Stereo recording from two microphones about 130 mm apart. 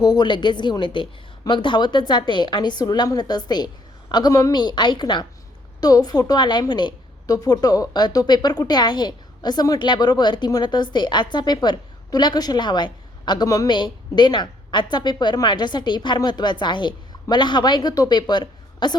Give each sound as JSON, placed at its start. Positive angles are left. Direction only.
{"t": 0.0, "sound": "a woman's voice", "side_deg": 30}